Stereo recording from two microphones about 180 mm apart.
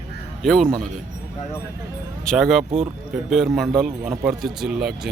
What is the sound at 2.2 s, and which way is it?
A man's voice, centre (ahead or behind).